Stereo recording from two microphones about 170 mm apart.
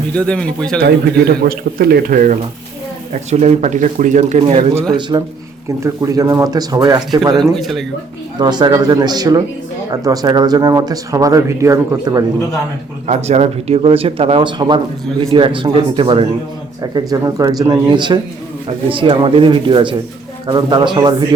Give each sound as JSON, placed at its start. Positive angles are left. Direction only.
{"t": 0.1, "sound": "a man's voice", "side_deg": 5}
{"t": 0.8, "sound": "speech", "side_deg": -65}
{"t": 3.1, "sound": "speech", "side_deg": -40}
{"t": 4.9, "sound": "speech", "side_deg": -25}
{"t": 7.5, "sound": "a man's voice", "side_deg": 0}
{"t": 8.4, "sound": "speech", "side_deg": -25}
{"t": 13.1, "sound": "speech", "side_deg": -40}